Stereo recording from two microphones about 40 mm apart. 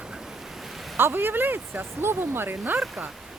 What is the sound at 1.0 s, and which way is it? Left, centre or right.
Speech, right.